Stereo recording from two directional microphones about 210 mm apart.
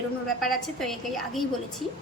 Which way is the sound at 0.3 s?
Centre (ahead or behind).